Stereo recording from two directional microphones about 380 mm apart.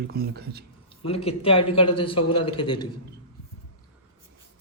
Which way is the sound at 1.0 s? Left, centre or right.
Centre.